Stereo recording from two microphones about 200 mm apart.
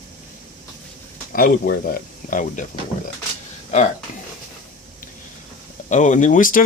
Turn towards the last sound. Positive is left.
turn(degrees=40)  # may be behind; listen again after turning